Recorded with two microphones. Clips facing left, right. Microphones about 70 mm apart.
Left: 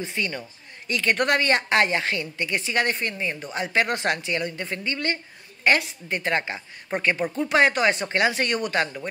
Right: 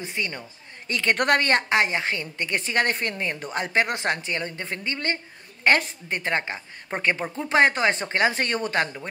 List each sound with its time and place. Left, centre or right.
0.0 s a woman's voice: right
0.8 s a woman's voice: right
1.7 s a woman's voice: right
2.1 s a woman's voice: right
3.7 s a woman's voice: right